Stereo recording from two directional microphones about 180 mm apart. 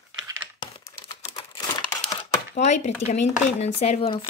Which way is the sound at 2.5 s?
40° left (ahead or behind).